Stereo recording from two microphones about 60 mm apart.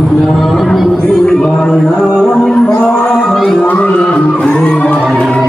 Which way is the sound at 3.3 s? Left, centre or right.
Centre.